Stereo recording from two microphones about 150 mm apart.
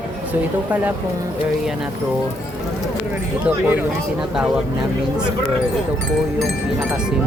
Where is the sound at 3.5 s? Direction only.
10° right (ahead or behind).